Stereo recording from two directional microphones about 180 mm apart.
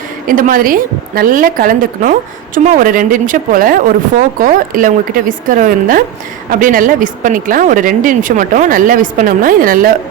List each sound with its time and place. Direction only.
0.3 s speech: 50° right (ahead or behind)